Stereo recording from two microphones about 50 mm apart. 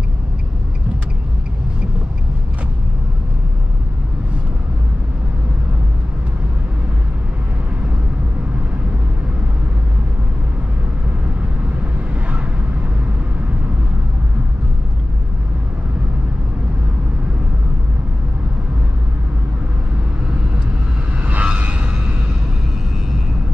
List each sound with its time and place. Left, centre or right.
11.8 s vehicle: right
21.3 s vehicle: right